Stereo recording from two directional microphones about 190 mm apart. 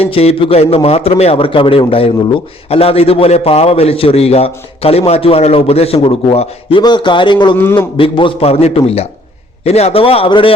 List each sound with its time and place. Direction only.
0.0 s a man's voice: 30° left (ahead or behind)
7.5 s a man's voice: 10° left (ahead or behind)
7.9 s a man's voice: 25° left (ahead or behind)